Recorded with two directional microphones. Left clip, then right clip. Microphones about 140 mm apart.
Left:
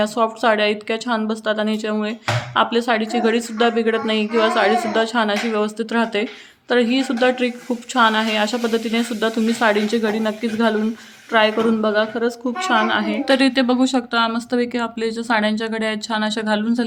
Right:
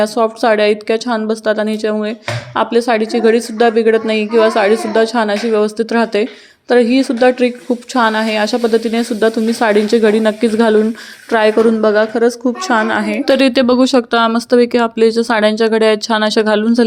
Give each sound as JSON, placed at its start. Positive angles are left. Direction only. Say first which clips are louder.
{"t": 0.0, "sound": "a woman's voice", "louder": "right 5 dB", "side_deg": -35}
{"t": 12.4, "sound": "speech", "louder": "right 5 dB", "side_deg": -25}
{"t": 12.7, "sound": "speech", "louder": "right 3 dB", "side_deg": -45}